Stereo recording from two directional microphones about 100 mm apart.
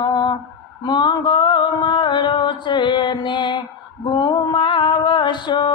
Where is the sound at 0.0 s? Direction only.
45° left (ahead or behind).